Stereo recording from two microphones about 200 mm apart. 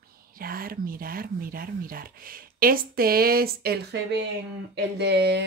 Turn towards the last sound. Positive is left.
turn(degrees=-55)  # may be behind; listen again after turning